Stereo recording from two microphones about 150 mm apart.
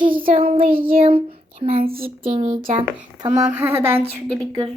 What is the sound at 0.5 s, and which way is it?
Speech, 35° right (ahead or behind).